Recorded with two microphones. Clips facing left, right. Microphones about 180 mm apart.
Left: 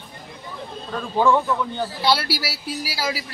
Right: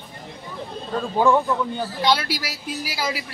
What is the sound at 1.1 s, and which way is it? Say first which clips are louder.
Speech: even; 15° right (ahead or behind).